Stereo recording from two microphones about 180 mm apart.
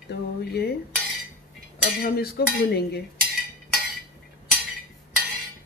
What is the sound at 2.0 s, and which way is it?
Speech, 60° left (ahead or behind).